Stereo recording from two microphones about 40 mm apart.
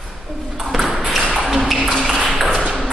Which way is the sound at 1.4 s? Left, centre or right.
Centre.